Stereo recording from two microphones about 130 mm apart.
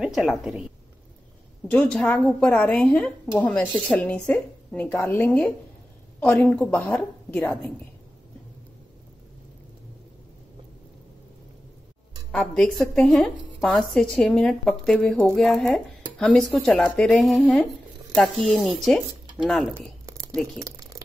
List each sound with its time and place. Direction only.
0.0 s a woman's voice: centre (ahead or behind)
1.7 s a woman's voice: 5° left (ahead or behind)
12.3 s a woman's voice: 5° left (ahead or behind)
20.1 s a sound: 25° right (ahead or behind)